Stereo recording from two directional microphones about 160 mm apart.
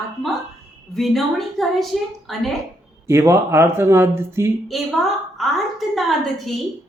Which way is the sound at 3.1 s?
15° right (ahead or behind).